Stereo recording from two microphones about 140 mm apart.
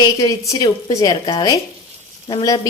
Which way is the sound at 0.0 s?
25° left (ahead or behind).